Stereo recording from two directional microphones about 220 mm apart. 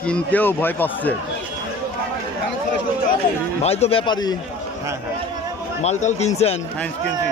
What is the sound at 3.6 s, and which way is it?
Speech, 30° left (ahead or behind).